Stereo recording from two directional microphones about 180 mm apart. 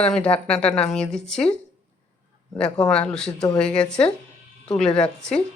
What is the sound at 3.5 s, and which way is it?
Speech, 5° left (ahead or behind).